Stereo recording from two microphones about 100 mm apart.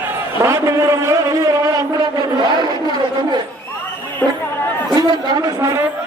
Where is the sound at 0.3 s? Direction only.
30° right (ahead or behind).